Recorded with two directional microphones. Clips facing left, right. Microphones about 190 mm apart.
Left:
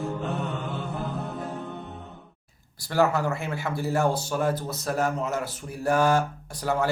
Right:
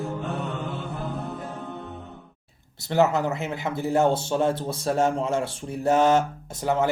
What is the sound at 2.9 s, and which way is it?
Speech, 20° right (ahead or behind).